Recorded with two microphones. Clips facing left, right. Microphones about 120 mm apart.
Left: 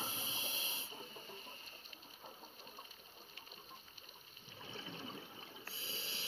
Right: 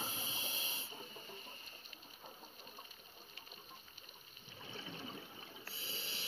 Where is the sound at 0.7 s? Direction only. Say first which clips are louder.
Even; 25° left (ahead or behind).